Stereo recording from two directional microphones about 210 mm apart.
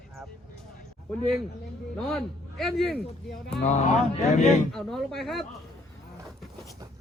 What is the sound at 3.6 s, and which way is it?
Speech, 35° left (ahead or behind).